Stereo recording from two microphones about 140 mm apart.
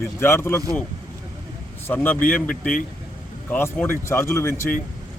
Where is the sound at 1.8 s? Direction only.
10° left (ahead or behind).